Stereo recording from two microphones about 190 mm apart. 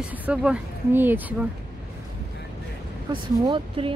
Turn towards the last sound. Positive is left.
turn(degrees=-25)  # may be behind; listen again after turning